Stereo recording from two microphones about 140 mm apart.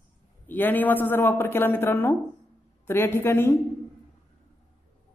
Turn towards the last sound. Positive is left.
turn(degrees=15)  # may be behind; listen again after turning